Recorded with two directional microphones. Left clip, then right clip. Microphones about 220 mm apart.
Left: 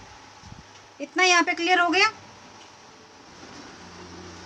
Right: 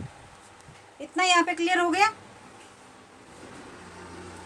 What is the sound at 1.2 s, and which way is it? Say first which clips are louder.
Speech: left 2 dB; 25° left (ahead or behind).